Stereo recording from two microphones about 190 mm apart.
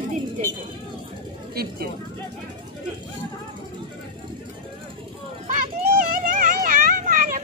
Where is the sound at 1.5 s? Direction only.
55° right (ahead or behind).